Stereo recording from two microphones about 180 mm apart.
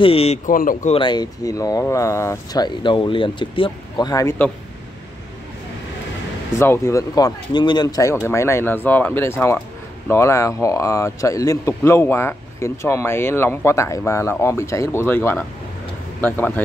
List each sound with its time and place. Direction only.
0.0 s speech: 35° left (ahead or behind)
0.5 s speech: 50° left (ahead or behind)
0.9 s speech: 25° left (ahead or behind)
6.6 s speech: 15° left (ahead or behind)